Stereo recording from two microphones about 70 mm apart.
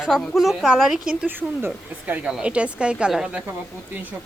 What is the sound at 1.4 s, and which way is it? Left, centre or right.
Speech, right.